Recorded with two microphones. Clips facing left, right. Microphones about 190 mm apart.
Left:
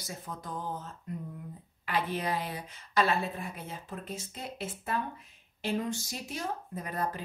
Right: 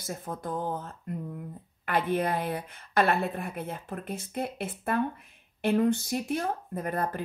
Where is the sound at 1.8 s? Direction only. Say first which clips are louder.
Right 5 dB; 55° right (ahead or behind).